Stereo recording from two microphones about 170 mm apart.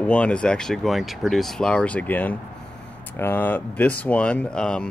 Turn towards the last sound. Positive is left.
turn(degrees=5)  # may be behind; listen again after turning